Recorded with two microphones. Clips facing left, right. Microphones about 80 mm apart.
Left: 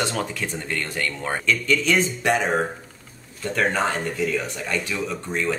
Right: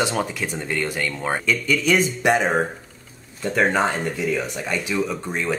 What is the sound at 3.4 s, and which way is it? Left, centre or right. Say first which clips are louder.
Speech: right 3 dB; centre.